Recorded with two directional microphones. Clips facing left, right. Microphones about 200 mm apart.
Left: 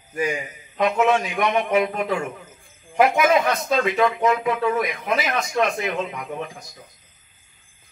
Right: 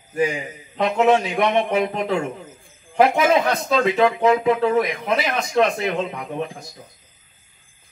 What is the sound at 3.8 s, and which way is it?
A man's voice, 30° right (ahead or behind).